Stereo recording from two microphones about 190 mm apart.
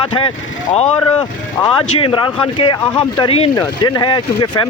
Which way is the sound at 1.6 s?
25° left (ahead or behind).